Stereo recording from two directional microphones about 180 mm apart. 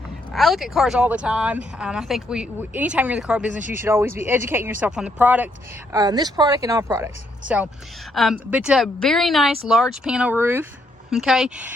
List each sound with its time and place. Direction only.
0.3 s speech: centre (ahead or behind)
5.9 s speech: 20° right (ahead or behind)